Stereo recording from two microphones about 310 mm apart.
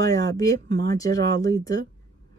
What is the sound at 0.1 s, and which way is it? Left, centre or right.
A woman's voice, centre.